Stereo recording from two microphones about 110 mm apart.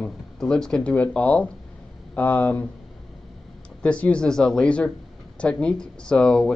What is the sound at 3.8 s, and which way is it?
Speech, 10° left (ahead or behind).